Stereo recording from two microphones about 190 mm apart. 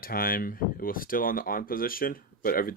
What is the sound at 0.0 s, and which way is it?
Speech, 50° left (ahead or behind).